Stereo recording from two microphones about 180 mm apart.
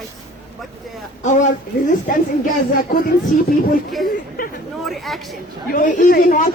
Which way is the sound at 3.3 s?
45° left (ahead or behind).